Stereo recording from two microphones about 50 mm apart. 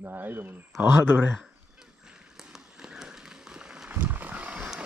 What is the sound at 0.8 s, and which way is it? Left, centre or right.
Speech, right.